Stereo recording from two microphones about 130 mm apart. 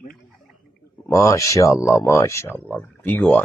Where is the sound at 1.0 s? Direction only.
25° left (ahead or behind).